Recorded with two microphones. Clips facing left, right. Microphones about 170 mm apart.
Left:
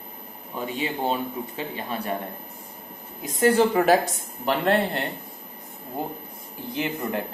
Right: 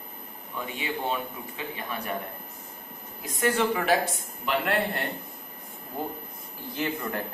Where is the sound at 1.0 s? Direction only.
30° left (ahead or behind).